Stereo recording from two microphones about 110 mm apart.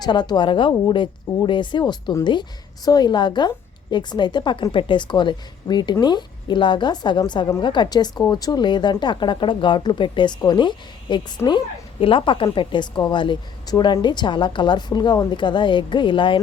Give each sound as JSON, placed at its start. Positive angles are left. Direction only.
{"t": 0.0, "sound": "speech", "side_deg": 40}